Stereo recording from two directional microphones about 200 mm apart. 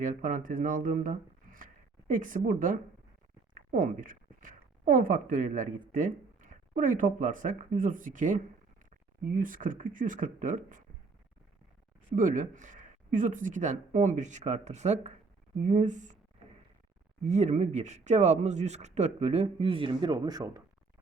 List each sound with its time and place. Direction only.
0.0 s speech: 40° right (ahead or behind)
12.1 s speech: 40° right (ahead or behind)
17.2 s speech: 35° right (ahead or behind); by 20.6 s 20° right (ahead or behind)